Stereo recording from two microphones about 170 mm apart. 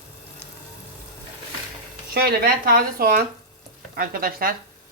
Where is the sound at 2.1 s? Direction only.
65° right (ahead or behind).